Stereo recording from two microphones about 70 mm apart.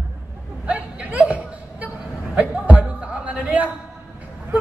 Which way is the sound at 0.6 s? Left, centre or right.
Centre.